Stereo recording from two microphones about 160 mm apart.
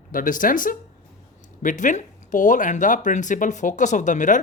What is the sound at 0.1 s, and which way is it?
Speech, 60° left (ahead or behind).